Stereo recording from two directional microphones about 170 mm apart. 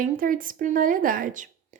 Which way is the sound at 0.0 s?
55° right (ahead or behind).